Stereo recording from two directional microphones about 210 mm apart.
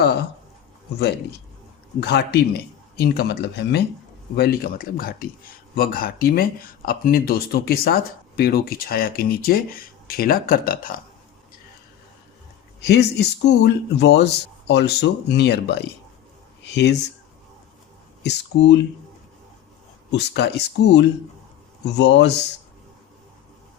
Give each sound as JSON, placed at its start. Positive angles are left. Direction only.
{"t": 2.0, "sound": "speech", "side_deg": 50}
{"t": 12.8, "sound": "speech", "side_deg": 50}
{"t": 18.2, "sound": "speech", "side_deg": 55}
{"t": 20.1, "sound": "speech", "side_deg": 55}